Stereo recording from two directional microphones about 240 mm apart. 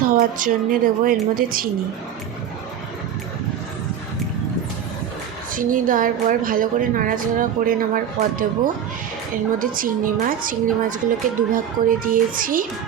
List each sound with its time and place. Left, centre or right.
0.0 s a woman's voice: right
5.5 s a woman's voice: right